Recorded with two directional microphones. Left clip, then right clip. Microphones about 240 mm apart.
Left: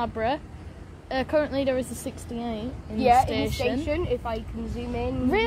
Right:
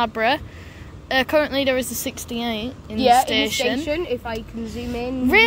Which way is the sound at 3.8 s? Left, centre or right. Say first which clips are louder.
Right 3 dB; right.